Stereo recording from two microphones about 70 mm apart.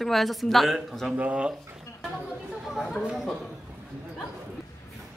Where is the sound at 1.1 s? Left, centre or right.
Centre.